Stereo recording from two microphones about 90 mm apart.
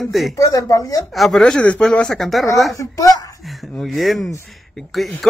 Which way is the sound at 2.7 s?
40° left (ahead or behind).